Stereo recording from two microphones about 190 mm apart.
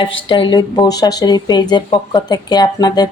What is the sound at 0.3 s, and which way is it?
Speech, 25° left (ahead or behind).